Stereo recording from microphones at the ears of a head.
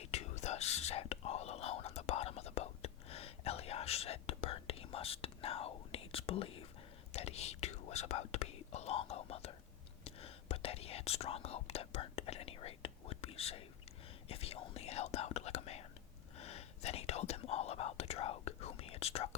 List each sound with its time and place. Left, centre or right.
0.0 s whispering: left